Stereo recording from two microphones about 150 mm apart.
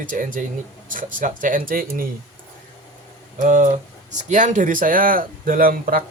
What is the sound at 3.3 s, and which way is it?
Speech, 60° right (ahead or behind).